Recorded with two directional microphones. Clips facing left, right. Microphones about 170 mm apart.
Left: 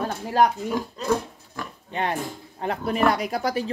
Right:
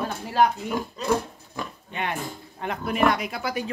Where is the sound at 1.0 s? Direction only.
Centre (ahead or behind).